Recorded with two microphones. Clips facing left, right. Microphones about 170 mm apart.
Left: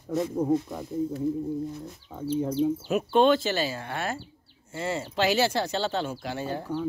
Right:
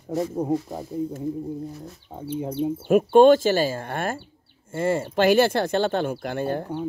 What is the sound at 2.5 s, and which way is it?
Speech, 55° right (ahead or behind).